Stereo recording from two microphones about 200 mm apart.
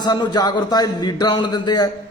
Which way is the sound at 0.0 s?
20° left (ahead or behind).